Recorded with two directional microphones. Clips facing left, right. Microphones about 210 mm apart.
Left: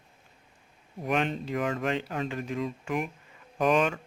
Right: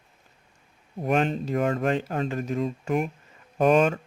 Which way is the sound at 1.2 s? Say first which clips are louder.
Right 5 dB; 40° right (ahead or behind).